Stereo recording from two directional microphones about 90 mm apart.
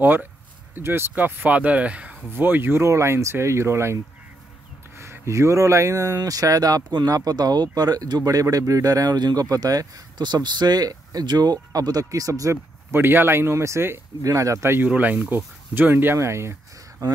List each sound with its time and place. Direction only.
0.0 s speech: 20° right (ahead or behind)
2.3 s speech: 25° right (ahead or behind); by 12.5 s 40° right (ahead or behind)
12.9 s speech: 25° right (ahead or behind)
14.9 s speech: 20° right (ahead or behind)